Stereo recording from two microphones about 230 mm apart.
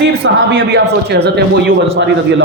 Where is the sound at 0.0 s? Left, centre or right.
Right.